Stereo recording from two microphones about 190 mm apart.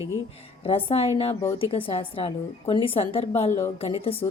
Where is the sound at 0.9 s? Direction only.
30° left (ahead or behind).